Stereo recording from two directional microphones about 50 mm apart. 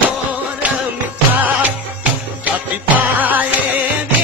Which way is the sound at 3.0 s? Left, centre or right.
Right.